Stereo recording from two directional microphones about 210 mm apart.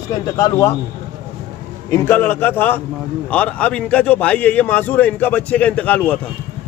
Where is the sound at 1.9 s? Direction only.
10° left (ahead or behind).